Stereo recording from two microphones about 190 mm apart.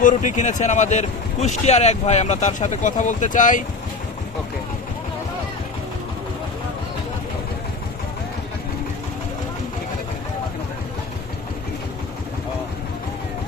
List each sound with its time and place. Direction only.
0.0 s speech: 45° left (ahead or behind)